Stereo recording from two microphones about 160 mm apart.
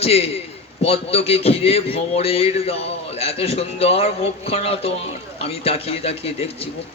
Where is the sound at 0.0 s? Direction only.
40° left (ahead or behind).